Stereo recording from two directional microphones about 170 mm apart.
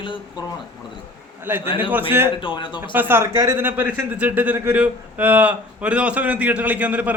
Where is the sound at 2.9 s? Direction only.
10° right (ahead or behind).